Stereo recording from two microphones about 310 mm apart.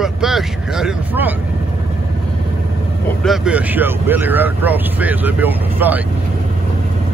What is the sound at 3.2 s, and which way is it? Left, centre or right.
Speech, centre.